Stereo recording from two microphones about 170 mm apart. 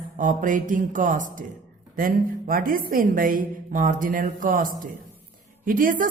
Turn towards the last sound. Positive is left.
turn(degrees=-50)  # may be behind; listen again after turning